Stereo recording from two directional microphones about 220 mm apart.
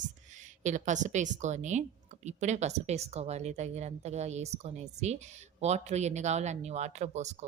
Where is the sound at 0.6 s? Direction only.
35° right (ahead or behind).